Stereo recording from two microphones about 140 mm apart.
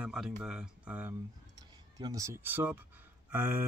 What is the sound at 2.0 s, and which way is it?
Speech, 25° right (ahead or behind).